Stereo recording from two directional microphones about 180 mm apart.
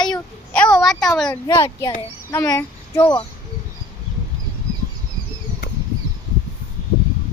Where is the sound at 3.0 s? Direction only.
30° left (ahead or behind).